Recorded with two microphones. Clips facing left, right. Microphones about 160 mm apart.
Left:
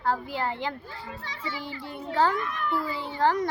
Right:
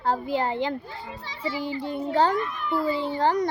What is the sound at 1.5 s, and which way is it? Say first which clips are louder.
Speech: right 9 dB; 15° right (ahead or behind).